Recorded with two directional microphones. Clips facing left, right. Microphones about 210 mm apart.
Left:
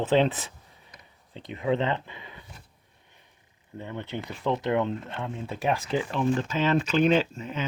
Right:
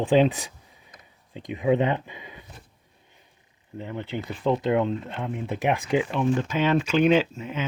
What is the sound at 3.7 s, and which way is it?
Speech, 15° right (ahead or behind).